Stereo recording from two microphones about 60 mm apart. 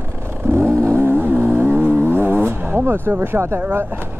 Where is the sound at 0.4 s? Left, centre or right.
Right.